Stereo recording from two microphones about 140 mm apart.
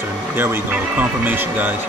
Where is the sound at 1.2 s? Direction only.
10° right (ahead or behind).